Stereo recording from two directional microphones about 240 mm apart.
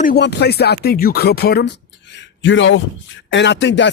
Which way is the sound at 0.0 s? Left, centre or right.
Left.